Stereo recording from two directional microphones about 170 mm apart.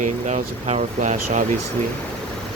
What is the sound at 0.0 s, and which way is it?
Speech, 45° right (ahead or behind).